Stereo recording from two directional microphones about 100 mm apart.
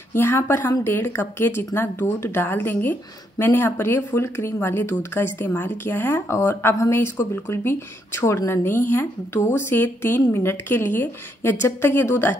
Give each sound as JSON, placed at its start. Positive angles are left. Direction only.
{"t": 0.1, "sound": "a woman's voice", "side_deg": 25}